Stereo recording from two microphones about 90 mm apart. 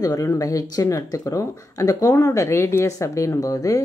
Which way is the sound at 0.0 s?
40° left (ahead or behind).